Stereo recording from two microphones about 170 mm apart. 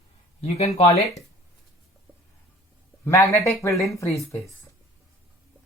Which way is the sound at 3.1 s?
15° left (ahead or behind).